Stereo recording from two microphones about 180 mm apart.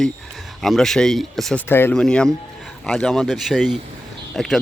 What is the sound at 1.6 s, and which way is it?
Speech, 10° left (ahead or behind).